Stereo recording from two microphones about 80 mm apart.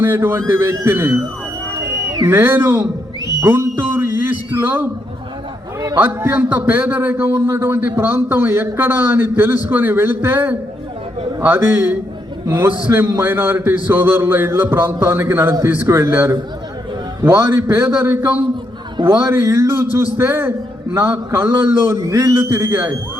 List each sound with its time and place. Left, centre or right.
0.0 s a man's voice: right
2.2 s a man's voice: right
6.0 s a man's voice: right
17.3 s a man's voice: right
22.0 s a man's voice: right